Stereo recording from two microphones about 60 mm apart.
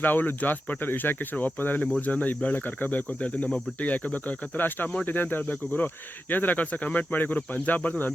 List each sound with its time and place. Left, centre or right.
0.0 s speech: left